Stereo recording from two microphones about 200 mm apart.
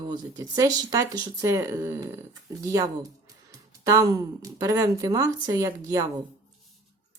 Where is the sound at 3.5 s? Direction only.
20° right (ahead or behind).